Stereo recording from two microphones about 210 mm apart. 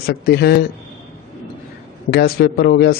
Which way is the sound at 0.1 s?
50° left (ahead or behind).